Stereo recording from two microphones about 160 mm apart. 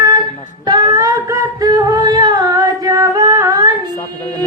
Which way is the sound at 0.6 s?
25° right (ahead or behind).